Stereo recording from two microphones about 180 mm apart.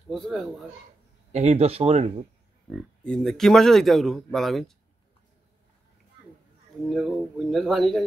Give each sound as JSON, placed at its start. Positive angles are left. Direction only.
{"t": 0.1, "sound": "a man's voice", "side_deg": 0}
{"t": 1.3, "sound": "speech", "side_deg": -40}
{"t": 2.7, "sound": "a man's voice", "side_deg": 5}
{"t": 6.9, "sound": "a man's voice", "side_deg": 0}